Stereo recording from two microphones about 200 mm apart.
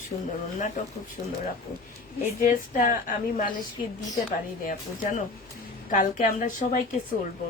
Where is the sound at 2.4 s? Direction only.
45° left (ahead or behind).